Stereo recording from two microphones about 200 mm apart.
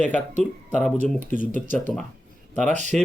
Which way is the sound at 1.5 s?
40° right (ahead or behind).